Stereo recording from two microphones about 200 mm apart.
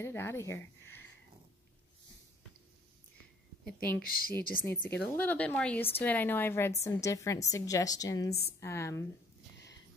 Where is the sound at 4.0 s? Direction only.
45° left (ahead or behind).